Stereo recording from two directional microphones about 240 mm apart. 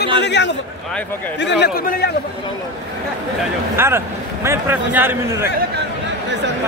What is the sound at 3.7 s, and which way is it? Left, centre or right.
Speech, centre.